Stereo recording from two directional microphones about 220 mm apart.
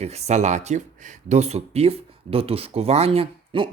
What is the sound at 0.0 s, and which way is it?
Speech, 30° right (ahead or behind).